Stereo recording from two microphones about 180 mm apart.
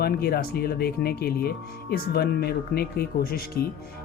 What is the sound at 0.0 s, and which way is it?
Speech, 60° left (ahead or behind).